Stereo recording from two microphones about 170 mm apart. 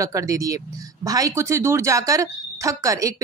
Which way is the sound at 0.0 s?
20° right (ahead or behind).